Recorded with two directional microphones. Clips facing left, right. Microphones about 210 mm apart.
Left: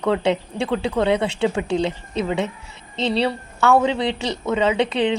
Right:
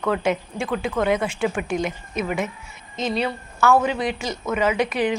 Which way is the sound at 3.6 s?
20° left (ahead or behind).